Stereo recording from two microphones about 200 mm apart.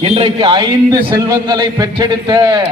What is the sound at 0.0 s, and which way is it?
A man's voice, 25° right (ahead or behind).